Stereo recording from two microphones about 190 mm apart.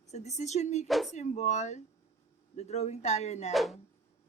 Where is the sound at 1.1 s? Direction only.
35° left (ahead or behind).